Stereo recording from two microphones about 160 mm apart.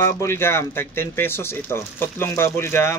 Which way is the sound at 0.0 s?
15° left (ahead or behind).